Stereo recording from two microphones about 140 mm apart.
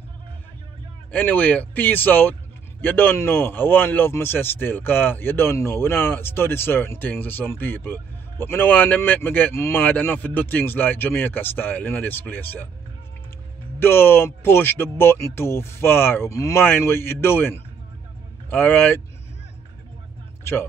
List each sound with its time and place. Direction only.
1.1 s a man's voice: 10° left (ahead or behind)
13.7 s a man's voice: 15° left (ahead or behind)